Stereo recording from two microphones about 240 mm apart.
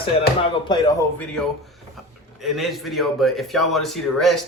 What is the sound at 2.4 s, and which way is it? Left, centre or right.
A man's voice, centre.